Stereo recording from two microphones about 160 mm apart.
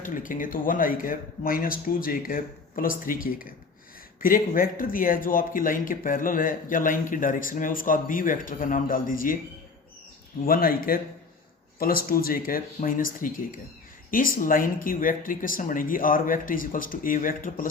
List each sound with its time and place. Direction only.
0.0 s a man's voice: 55° left (ahead or behind)
10.4 s a man's voice: 65° left (ahead or behind)